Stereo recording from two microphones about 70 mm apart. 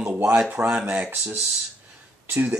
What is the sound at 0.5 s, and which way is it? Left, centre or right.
Speech, right.